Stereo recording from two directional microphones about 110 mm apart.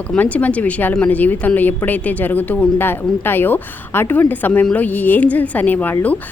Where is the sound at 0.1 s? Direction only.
15° left (ahead or behind).